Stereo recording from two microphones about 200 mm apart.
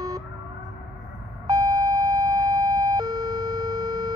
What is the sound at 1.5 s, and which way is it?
Siren, 20° right (ahead or behind).